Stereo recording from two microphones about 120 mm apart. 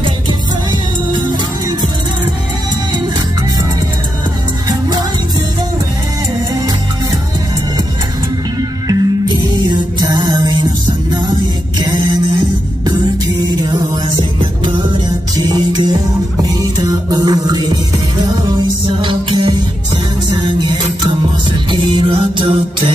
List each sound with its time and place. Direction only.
0.0 s music: 40° right (ahead or behind)
4.6 s music: 35° right (ahead or behind)
8.8 s music: 35° right (ahead or behind)
11.8 s a sound: 40° right (ahead or behind)
13.6 s music: 40° right (ahead or behind)